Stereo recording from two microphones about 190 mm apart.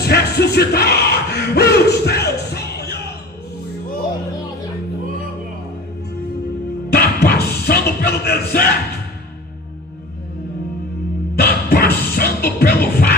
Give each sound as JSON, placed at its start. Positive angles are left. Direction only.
{"t": 0.0, "sound": "music", "side_deg": 60}
{"t": 6.9, "sound": "music", "side_deg": 55}
{"t": 11.3, "sound": "music", "side_deg": 50}